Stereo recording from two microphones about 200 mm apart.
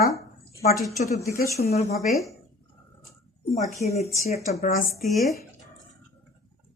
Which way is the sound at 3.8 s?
30° left (ahead or behind).